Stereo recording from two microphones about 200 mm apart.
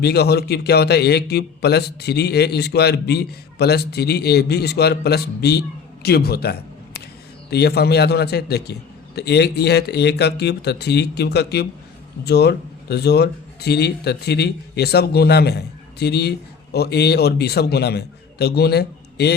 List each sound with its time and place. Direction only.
0.0 s a man's voice: 55° left (ahead or behind)